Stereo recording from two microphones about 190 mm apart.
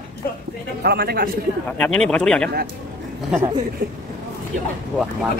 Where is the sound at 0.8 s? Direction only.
55° right (ahead or behind).